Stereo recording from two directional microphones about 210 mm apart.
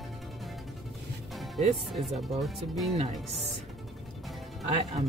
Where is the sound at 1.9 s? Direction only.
Centre (ahead or behind).